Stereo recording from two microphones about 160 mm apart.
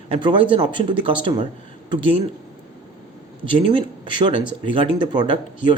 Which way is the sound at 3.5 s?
35° right (ahead or behind).